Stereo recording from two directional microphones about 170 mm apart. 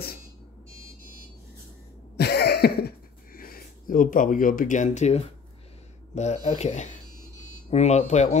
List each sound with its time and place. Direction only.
2.1 s cough: 70° left (ahead or behind)
3.3 s speech: 60° left (ahead or behind); by 8.4 s 45° left (ahead or behind)